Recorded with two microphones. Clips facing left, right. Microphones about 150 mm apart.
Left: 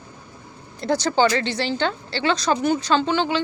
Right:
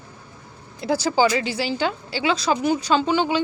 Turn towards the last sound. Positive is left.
turn(degrees=-10)  # may be behind; listen again after turning